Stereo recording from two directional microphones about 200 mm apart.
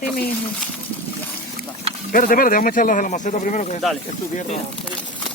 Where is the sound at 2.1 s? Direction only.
45° left (ahead or behind).